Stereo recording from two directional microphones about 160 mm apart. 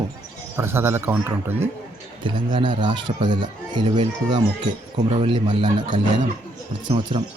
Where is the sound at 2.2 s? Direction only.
30° right (ahead or behind).